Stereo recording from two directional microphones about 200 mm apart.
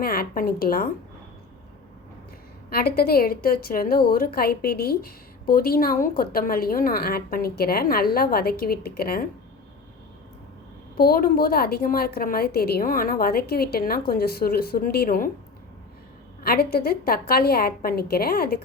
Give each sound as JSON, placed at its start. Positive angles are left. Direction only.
{"t": 0.0, "sound": "a woman's voice", "side_deg": 50}
{"t": 2.6, "sound": "a woman's voice", "side_deg": 50}
{"t": 10.9, "sound": "a woman's voice", "side_deg": 50}
{"t": 16.4, "sound": "a woman's voice", "side_deg": 50}